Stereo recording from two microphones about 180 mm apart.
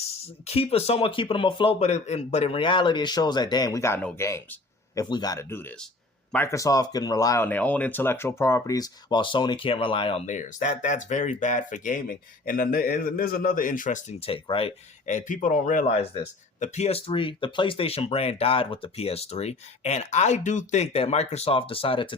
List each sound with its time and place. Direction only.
0.4 s speech: 35° left (ahead or behind)